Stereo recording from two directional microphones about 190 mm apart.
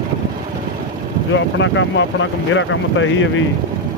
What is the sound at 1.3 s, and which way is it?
Speech, 80° left.